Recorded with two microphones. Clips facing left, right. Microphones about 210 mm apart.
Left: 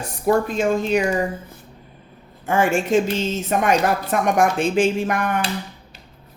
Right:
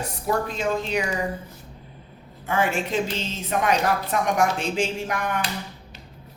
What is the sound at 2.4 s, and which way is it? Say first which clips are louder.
Speech: left 5 dB; 45° left (ahead or behind).